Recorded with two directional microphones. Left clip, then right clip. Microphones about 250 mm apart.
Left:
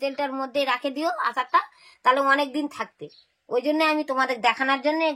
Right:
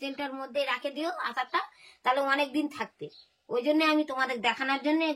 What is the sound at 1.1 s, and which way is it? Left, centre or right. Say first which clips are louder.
A woman's voice: left 10 dB; left.